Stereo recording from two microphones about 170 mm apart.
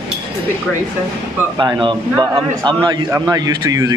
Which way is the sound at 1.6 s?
25° right (ahead or behind).